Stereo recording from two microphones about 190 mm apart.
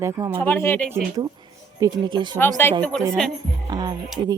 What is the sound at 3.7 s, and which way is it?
Music, 20° right (ahead or behind).